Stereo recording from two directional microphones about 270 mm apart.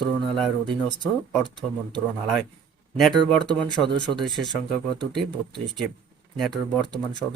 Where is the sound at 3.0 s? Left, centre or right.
Centre.